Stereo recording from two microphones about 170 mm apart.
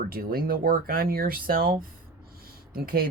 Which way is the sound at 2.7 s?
60° right (ahead or behind).